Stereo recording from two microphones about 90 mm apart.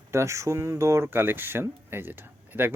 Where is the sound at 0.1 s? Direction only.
30° right (ahead or behind).